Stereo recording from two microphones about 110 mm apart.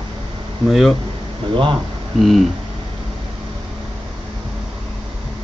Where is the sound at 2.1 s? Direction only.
Centre (ahead or behind).